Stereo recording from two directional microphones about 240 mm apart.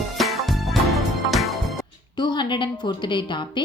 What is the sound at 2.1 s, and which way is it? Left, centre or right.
A woman's voice, centre.